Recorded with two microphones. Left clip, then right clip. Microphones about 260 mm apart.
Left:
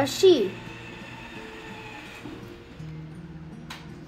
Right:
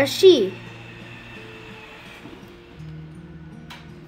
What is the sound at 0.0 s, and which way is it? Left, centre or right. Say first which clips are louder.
Speech: right 5 dB; right.